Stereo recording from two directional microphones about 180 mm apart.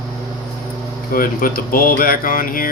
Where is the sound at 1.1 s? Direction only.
50° left (ahead or behind).